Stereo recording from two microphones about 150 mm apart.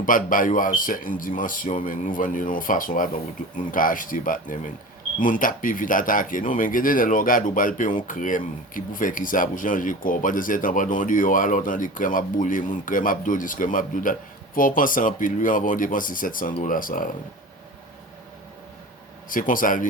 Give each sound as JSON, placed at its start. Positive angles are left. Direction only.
{"t": 0.0, "sound": "speech", "side_deg": 65}
{"t": 19.3, "sound": "speech", "side_deg": 65}